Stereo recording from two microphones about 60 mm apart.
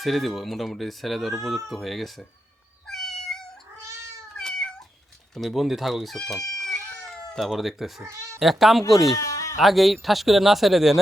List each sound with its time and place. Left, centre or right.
0.0 s speech: centre
2.8 s cat: centre
5.3 s speech: centre
9.1 s bleat: left
9.6 s speech: centre